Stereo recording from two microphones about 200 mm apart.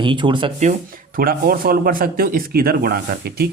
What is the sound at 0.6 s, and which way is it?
Speech, 45° right (ahead or behind).